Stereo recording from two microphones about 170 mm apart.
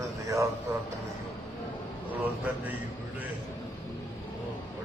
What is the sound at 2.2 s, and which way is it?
Speech, 10° right (ahead or behind).